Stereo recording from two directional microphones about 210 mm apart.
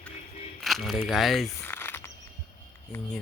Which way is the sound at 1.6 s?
10° left (ahead or behind).